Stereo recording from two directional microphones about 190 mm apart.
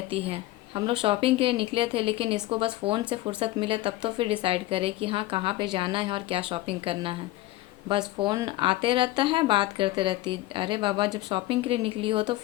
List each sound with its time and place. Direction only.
0.1 s speech: 30° right (ahead or behind)